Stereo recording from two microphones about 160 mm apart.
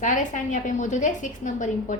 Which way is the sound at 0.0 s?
55° left (ahead or behind).